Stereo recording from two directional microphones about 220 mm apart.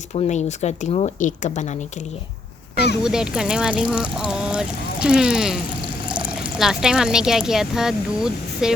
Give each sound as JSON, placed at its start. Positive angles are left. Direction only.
{"t": 0.1, "sound": "speech", "side_deg": 30}
{"t": 3.0, "sound": "speech", "side_deg": -5}